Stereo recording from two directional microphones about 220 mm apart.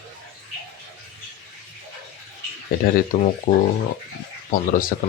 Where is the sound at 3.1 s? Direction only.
35° left (ahead or behind).